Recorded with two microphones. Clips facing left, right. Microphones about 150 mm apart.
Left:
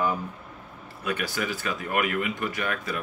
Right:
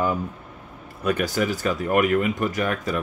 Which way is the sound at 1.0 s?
45° right (ahead or behind).